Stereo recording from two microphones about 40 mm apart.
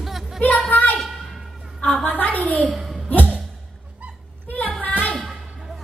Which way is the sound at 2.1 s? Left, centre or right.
Left.